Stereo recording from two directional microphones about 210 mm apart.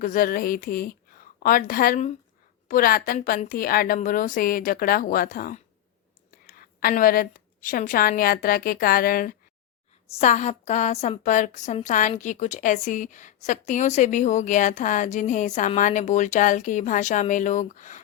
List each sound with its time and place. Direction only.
0.0 s a woman's voice: 40° left (ahead or behind)